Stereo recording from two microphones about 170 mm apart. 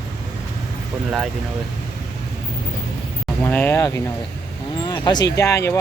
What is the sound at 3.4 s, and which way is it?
Speech, 10° left (ahead or behind).